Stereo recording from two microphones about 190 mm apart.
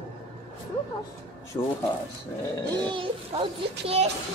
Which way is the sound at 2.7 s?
25° right (ahead or behind).